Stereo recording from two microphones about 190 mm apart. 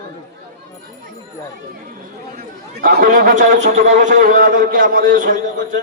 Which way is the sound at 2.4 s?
50° right (ahead or behind).